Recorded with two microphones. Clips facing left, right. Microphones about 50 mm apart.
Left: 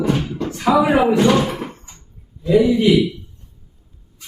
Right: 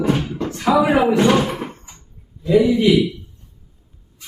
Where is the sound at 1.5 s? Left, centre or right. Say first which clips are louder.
Even; centre.